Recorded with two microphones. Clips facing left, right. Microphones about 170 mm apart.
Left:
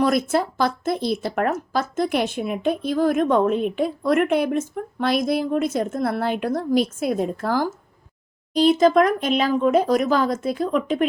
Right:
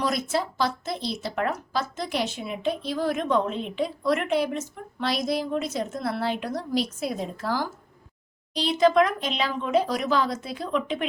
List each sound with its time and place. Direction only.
0.0 s speech: 50° left (ahead or behind)